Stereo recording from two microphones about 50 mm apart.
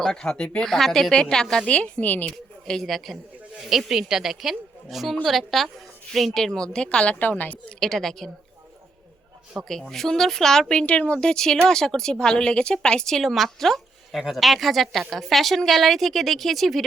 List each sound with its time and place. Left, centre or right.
0.0 s speech: centre
0.6 s speech: centre
1.6 s a woman's voice: left
2.0 s a woman's voice: left
2.6 s speech: centre
3.6 s a woman's voice: centre; by 7.6 s left
7.8 s speech: centre
9.6 s speech: centre